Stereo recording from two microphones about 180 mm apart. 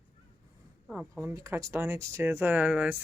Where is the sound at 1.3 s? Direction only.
15° right (ahead or behind).